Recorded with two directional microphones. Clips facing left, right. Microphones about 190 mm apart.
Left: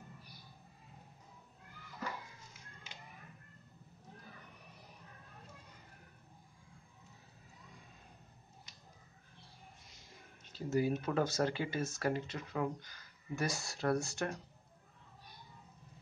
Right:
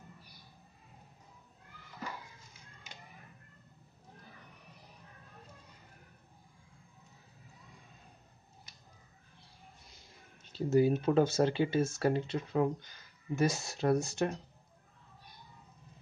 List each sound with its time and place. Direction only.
10.7 s speech: 25° right (ahead or behind)